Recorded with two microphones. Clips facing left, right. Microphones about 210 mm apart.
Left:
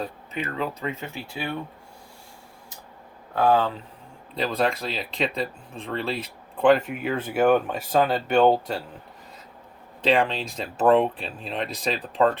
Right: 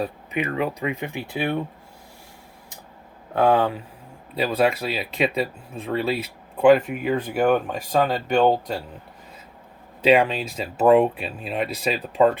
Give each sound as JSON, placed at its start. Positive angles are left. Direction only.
{"t": 0.0, "sound": "speech", "side_deg": -15}
{"t": 3.3, "sound": "speech", "side_deg": -20}
{"t": 10.0, "sound": "speech", "side_deg": -10}